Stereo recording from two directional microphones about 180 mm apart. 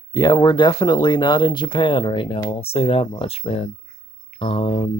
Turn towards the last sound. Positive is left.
turn(degrees=30)  # may be behind; listen again after turning